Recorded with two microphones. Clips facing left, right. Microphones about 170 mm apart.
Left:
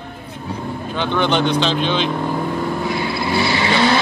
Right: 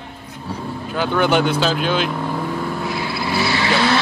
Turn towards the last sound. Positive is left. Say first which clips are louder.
# left 1 dB
turn(degrees=0)  # may be behind; listen again after turning